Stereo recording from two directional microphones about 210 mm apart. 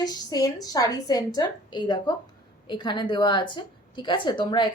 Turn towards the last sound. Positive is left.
turn(degrees=20)  # may be behind; listen again after turning